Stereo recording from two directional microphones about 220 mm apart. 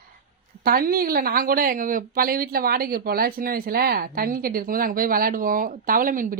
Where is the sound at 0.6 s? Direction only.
40° right (ahead or behind).